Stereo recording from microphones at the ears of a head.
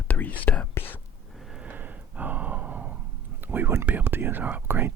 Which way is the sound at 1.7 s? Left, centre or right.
Right.